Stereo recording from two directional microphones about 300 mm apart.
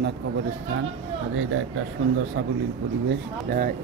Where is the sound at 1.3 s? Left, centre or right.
Right.